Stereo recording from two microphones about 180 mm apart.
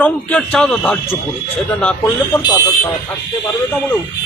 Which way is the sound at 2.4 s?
15° left (ahead or behind).